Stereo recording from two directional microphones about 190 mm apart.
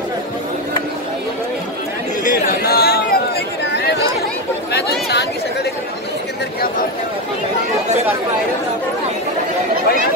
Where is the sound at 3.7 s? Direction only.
55° left (ahead or behind).